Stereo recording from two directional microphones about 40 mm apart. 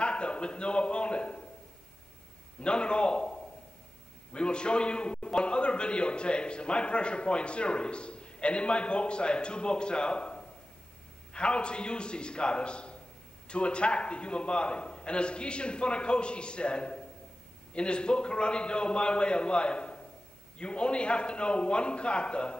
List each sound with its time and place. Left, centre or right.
0.0 s a man's voice: left
2.6 s a man's voice: left